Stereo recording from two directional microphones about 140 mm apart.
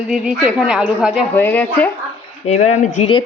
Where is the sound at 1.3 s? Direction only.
10° left (ahead or behind).